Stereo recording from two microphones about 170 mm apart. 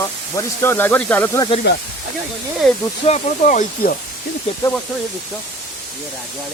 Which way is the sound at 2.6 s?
Centre (ahead or behind).